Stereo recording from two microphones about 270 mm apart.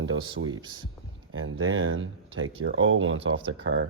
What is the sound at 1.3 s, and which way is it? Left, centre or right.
Speech, right.